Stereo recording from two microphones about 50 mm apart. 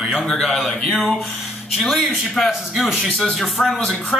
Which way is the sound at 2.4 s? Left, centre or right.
Centre.